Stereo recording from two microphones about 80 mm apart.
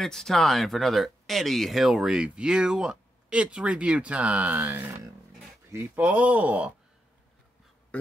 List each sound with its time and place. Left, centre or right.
0.0 s speech: centre; by 4.9 s right
5.9 s speech: centre
7.9 s a sound: centre